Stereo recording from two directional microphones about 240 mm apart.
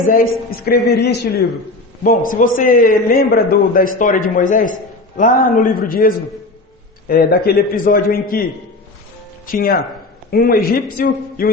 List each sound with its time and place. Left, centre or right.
0.1 s a man's voice: left
9.5 s a man's voice: left